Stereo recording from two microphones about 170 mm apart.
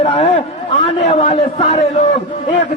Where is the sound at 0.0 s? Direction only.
35° left (ahead or behind).